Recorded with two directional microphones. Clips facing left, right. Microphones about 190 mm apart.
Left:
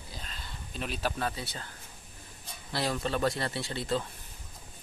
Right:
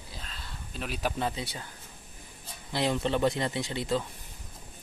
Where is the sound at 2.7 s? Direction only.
20° right (ahead or behind).